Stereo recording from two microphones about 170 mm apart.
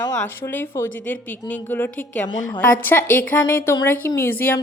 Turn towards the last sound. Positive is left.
turn(degrees=10)  # may be behind; listen again after turning